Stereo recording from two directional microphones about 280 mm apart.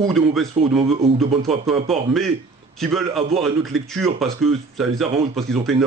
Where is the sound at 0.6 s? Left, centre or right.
Right.